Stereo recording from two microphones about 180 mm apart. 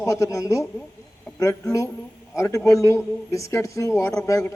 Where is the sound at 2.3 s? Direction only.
15° left (ahead or behind).